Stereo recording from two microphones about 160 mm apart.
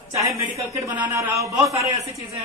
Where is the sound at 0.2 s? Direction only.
20° right (ahead or behind).